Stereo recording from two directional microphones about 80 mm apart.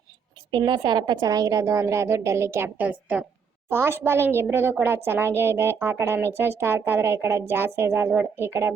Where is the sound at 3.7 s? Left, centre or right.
Right.